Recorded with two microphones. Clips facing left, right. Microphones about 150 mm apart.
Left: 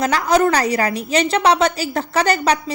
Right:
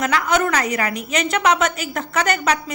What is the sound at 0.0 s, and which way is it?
A woman's voice, 35° left (ahead or behind).